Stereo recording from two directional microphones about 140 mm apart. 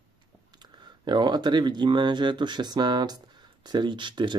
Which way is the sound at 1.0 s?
30° right (ahead or behind).